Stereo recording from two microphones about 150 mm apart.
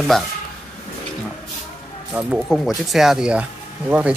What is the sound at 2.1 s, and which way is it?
A man's voice, 10° right (ahead or behind).